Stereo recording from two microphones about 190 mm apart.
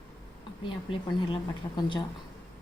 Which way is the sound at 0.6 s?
25° left (ahead or behind).